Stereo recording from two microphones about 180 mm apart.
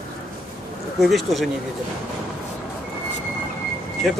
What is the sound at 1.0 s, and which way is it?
Speech, centre (ahead or behind).